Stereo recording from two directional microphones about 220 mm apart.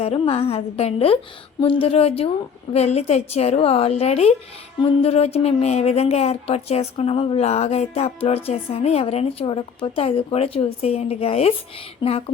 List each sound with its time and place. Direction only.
0.0 s speech: 25° left (ahead or behind)